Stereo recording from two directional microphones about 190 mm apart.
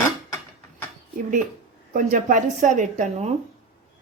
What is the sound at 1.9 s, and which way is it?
A woman's voice, 40° right (ahead or behind).